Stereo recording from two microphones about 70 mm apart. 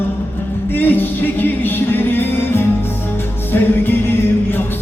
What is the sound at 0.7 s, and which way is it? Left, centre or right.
Music, left.